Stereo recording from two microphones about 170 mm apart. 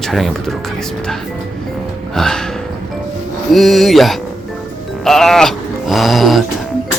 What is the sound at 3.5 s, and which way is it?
Speech, centre (ahead or behind).